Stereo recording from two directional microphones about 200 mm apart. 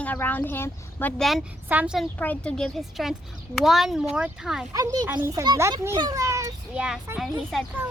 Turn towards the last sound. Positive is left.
turn(degrees=0)  # may be behind; listen again after turning